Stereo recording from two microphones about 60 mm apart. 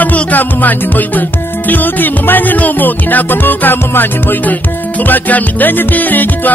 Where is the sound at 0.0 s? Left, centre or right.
Left.